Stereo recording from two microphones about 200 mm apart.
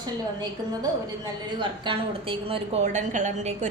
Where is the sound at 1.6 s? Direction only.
25° right (ahead or behind).